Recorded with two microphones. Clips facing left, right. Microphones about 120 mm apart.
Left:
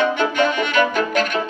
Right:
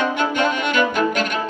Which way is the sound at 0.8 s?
45° left (ahead or behind).